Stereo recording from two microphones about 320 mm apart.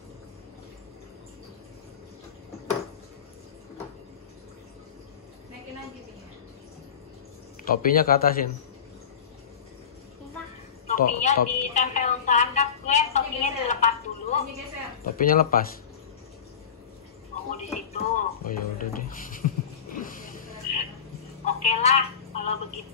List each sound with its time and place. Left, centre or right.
7.6 s a man's voice: left
10.9 s a sound: left
15.1 s a man's voice: left
17.5 s music: left
20.0 s a sound: left
21.5 s telephone: centre